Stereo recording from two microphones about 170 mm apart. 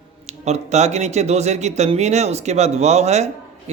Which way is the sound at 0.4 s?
40° right (ahead or behind).